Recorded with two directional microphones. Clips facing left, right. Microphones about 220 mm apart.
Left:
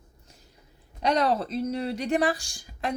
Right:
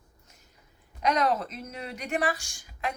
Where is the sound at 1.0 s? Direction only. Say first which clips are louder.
Left 2 dB; 30° left (ahead or behind).